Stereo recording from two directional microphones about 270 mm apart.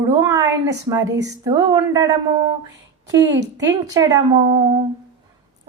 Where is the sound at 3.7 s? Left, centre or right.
Centre.